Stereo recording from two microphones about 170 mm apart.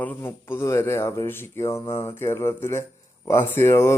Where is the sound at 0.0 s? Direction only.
10° left (ahead or behind).